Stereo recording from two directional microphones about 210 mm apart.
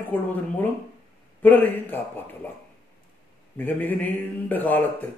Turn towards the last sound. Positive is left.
turn(degrees=10)  # may be behind; listen again after turning